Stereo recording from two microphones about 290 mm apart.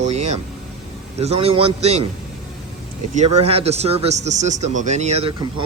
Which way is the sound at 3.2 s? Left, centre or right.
Right.